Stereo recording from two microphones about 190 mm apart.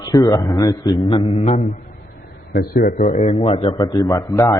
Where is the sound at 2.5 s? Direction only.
50° left (ahead or behind).